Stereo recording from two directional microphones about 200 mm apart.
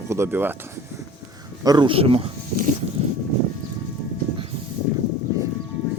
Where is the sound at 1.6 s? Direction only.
20° right (ahead or behind).